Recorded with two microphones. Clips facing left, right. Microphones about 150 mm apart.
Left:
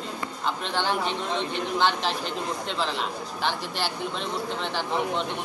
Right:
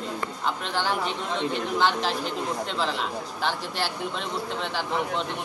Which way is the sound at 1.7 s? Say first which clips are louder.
Even; 5° right (ahead or behind).